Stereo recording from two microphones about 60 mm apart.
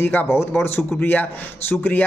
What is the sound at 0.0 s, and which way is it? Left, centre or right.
Speech, left.